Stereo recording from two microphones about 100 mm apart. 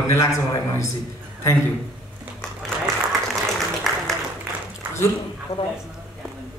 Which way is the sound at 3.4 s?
Centre (ahead or behind).